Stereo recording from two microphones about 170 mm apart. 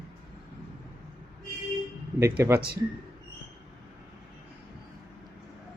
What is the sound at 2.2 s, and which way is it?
Speech, 15° right (ahead or behind).